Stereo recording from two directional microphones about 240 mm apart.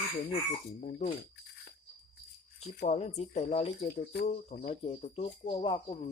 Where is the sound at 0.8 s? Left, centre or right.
Left.